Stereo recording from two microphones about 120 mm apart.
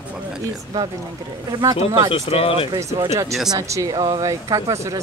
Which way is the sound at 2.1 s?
50° left (ahead or behind).